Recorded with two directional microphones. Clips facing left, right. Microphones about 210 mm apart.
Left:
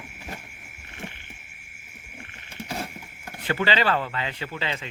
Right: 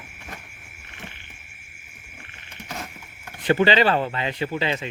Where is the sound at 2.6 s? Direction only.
30° left (ahead or behind).